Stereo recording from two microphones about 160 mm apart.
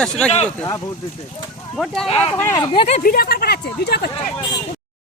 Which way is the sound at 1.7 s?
5° left (ahead or behind).